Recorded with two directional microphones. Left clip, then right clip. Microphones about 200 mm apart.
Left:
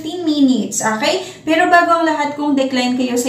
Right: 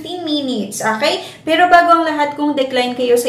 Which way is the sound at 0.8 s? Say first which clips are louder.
Right 3 dB; 20° right (ahead or behind).